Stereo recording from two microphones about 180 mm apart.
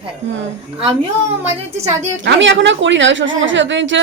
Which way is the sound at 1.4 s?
15° right (ahead or behind).